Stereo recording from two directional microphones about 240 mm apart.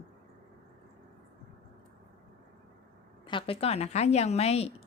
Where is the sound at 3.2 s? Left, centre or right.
Left.